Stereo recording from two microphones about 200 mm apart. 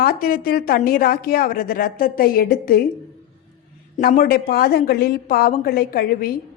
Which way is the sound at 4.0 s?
45° left (ahead or behind).